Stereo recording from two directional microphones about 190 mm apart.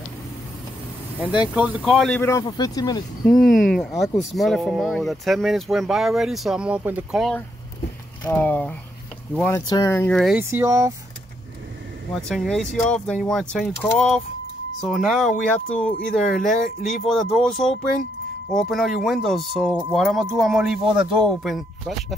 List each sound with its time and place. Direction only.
1.2 s speech: 5° right (ahead or behind); by 3.0 s 20° left (ahead or behind)
3.3 s speech: centre (ahead or behind)
8.2 s speech: 10° left (ahead or behind)
10.1 s speech: centre (ahead or behind)
10.5 s speech: 15° right (ahead or behind)
12.3 s speech: centre (ahead or behind)